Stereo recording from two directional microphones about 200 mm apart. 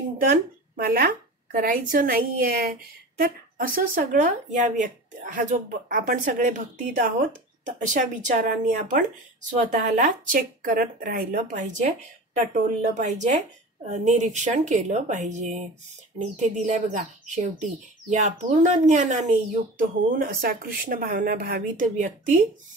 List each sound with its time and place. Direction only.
0.8 s a woman's voice: 50° right (ahead or behind)